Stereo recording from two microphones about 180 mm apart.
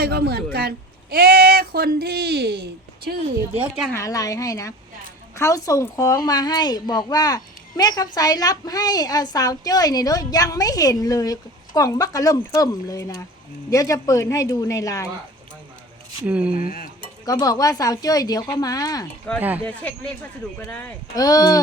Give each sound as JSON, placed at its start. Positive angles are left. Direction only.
{"t": 0.0, "sound": "speech", "side_deg": -60}
{"t": 3.9, "sound": "a woman's voice", "side_deg": 20}
{"t": 16.2, "sound": "speech", "side_deg": -5}
{"t": 16.6, "sound": "cutlery", "side_deg": 50}
{"t": 17.2, "sound": "a woman's voice", "side_deg": 20}
{"t": 19.4, "sound": "speech", "side_deg": -10}
{"t": 19.6, "sound": "speech", "side_deg": 5}
{"t": 21.2, "sound": "a woman's voice", "side_deg": 20}